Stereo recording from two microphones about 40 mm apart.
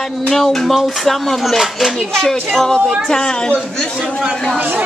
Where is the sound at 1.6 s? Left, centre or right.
Centre.